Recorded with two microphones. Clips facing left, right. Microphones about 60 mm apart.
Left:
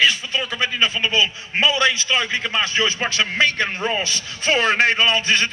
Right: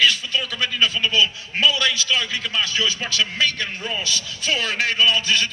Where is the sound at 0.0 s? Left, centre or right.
Left.